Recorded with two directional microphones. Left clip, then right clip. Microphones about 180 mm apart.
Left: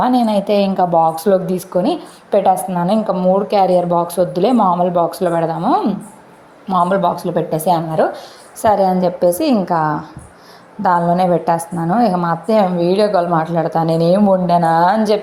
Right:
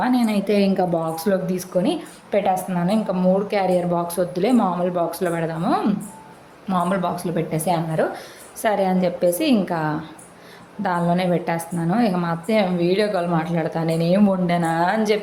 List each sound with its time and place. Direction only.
0.0 s a woman's voice: 20° left (ahead or behind)